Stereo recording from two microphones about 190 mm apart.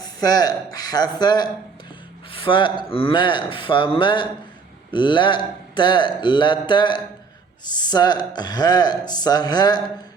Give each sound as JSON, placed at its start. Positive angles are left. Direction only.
{"t": 0.0, "sound": "speech", "side_deg": 20}